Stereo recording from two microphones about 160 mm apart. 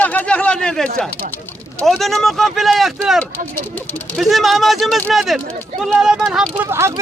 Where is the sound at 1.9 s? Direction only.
Centre (ahead or behind).